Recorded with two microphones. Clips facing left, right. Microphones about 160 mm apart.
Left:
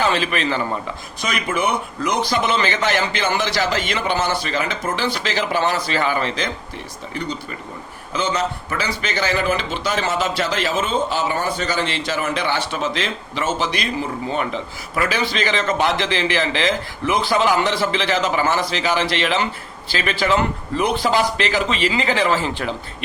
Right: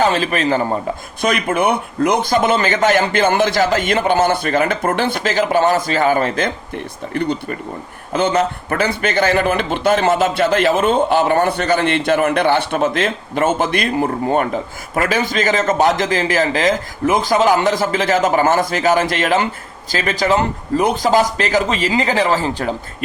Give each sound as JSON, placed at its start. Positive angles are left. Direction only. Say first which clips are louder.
{"t": 0.0, "sound": "a man's voice", "louder": "right 4 dB", "side_deg": -40}
{"t": 1.2, "sound": "a man's voice", "louder": "right 5 dB", "side_deg": -55}